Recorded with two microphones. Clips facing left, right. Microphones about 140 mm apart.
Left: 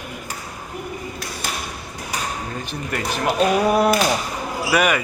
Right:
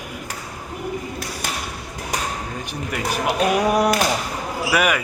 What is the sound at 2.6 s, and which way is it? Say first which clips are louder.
A man's voice: right 1 dB; 10° right (ahead or behind).